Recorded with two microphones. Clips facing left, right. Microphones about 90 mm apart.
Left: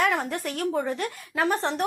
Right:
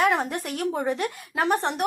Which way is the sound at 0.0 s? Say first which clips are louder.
Right 2 dB; 20° right (ahead or behind).